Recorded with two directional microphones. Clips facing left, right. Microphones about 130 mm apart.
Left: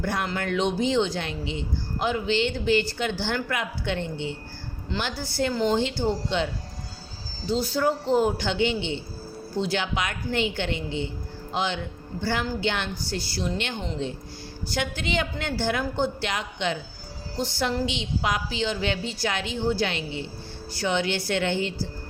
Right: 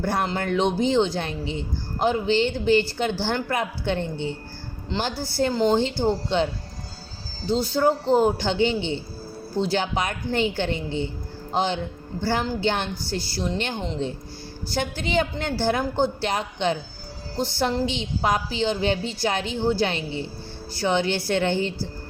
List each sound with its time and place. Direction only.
0.0 s a woman's voice: 35° right (ahead or behind)